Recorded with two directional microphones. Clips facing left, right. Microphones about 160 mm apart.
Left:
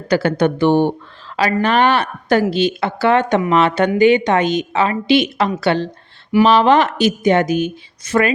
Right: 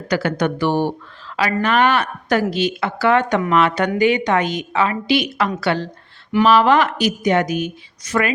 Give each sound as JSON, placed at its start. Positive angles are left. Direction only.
{"t": 0.1, "sound": "a woman's voice", "side_deg": 30}